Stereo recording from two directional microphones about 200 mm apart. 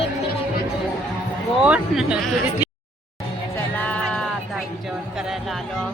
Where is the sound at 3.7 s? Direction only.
5° left (ahead or behind).